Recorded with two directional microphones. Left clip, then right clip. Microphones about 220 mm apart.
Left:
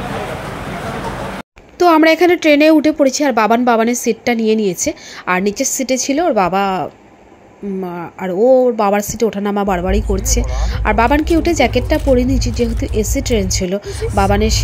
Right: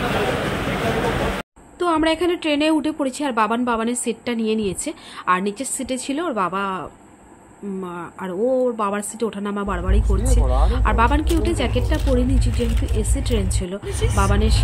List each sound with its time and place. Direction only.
1.8 s a woman's voice: 25° left (ahead or behind)